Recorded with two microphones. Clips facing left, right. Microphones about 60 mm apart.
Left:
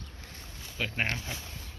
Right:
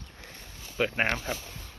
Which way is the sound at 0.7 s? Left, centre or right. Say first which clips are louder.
Right 5 dB; right.